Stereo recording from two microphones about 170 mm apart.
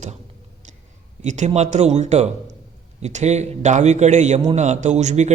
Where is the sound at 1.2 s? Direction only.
45° right (ahead or behind).